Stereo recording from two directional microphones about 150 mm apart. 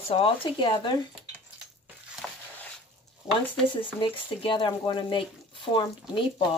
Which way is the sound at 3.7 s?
35° left (ahead or behind).